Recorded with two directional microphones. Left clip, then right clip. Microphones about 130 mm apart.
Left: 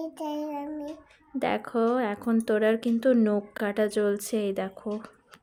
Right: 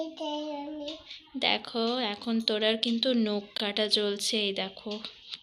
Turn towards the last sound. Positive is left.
turn(degrees=60)  # may be behind; listen again after turning